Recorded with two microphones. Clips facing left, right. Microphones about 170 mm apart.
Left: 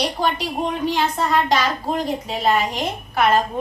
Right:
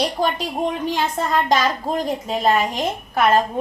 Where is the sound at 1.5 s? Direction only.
45° right (ahead or behind).